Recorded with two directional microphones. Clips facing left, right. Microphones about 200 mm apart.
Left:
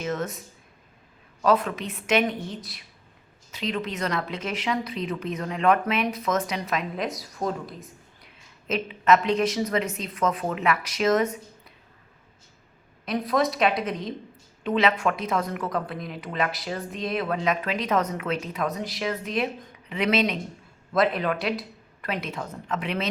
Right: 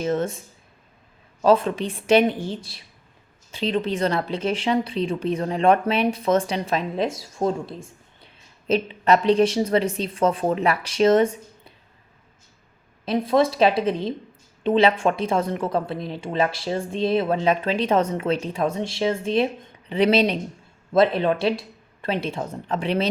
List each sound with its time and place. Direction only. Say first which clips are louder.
0.0 s speech: right 6 dB; 30° right (ahead or behind)
13.1 s speech: right 5 dB; 30° right (ahead or behind)